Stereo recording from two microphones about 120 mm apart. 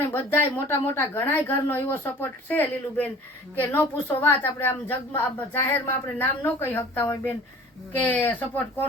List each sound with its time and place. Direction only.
0.1 s a woman's voice: 20° left (ahead or behind)